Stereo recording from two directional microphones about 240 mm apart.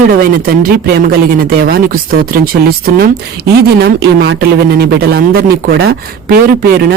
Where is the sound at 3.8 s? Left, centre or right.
Right.